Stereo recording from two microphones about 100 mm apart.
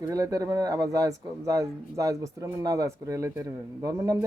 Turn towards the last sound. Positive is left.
turn(degrees=-35)  # may be behind; listen again after turning